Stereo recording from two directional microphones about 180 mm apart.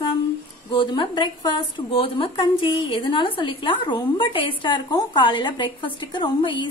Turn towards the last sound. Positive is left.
turn(degrees=25)  # may be behind; listen again after turning